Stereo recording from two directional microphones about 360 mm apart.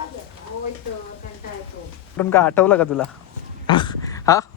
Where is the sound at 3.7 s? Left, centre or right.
Centre.